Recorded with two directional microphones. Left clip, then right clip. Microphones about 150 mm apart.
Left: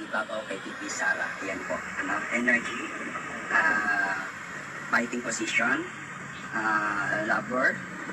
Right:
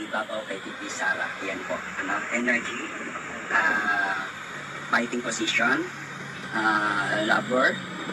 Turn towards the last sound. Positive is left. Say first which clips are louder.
# right 3 dB
turn(degrees=-30)  # may be behind; listen again after turning